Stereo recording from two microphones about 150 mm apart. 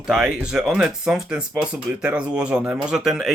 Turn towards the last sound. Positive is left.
turn(degrees=-5)  # may be behind; listen again after turning